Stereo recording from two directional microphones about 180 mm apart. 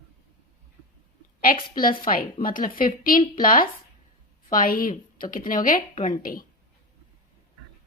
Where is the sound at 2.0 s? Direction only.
55° left (ahead or behind).